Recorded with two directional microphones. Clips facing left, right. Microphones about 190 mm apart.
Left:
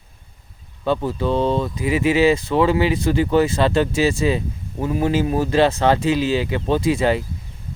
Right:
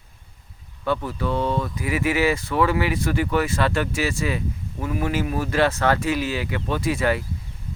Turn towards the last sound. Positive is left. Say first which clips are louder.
# left 4 dB
turn(degrees=20)  # may be behind; listen again after turning